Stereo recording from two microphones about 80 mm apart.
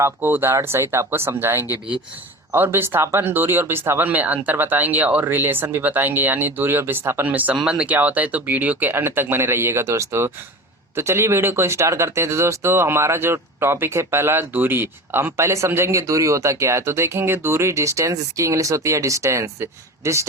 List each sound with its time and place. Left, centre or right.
0.0 s speech: right